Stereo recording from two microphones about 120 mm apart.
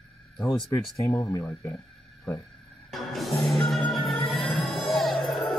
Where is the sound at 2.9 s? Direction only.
Centre (ahead or behind).